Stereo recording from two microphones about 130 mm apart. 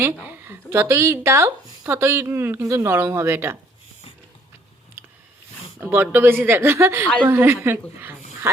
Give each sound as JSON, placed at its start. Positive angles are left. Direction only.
{"t": 0.0, "sound": "speech", "side_deg": -15}
{"t": 5.8, "sound": "speech", "side_deg": -15}